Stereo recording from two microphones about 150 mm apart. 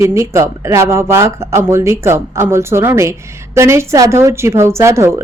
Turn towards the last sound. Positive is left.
turn(degrees=-20)  # may be behind; listen again after turning